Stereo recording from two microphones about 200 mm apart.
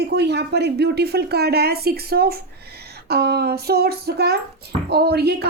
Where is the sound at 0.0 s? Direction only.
55° right (ahead or behind).